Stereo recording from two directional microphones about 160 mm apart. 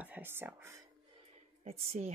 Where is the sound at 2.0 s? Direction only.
55° right (ahead or behind).